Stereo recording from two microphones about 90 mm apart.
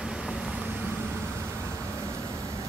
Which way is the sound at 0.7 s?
20° right (ahead or behind).